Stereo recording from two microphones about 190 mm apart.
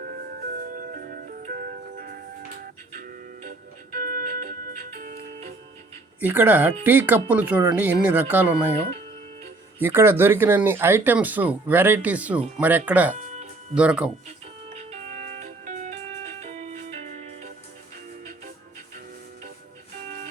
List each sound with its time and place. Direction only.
0.8 s music: 50° right (ahead or behind)
6.1 s speech: 10° right (ahead or behind)
9.8 s speech: 10° right (ahead or behind)
13.1 s music: 40° right (ahead or behind)
13.7 s speech: 5° right (ahead or behind)
14.3 s music: 35° right (ahead or behind)